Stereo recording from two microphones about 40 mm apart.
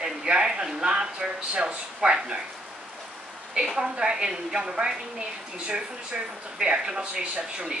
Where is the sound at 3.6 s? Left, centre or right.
Centre.